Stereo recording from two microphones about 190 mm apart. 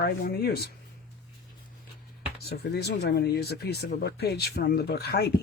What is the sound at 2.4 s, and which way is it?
Speech, 55° left (ahead or behind).